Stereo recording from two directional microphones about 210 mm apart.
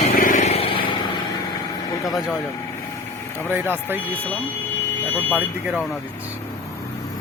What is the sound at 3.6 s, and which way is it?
Speech, 10° right (ahead or behind).